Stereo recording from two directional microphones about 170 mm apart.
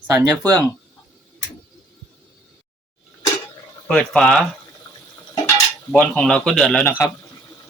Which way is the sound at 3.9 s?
5° left (ahead or behind).